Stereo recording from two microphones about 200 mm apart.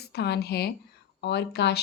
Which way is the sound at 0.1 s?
55° left (ahead or behind).